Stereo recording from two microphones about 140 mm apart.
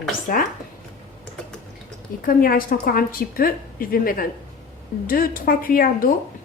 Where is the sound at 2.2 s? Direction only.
90° left.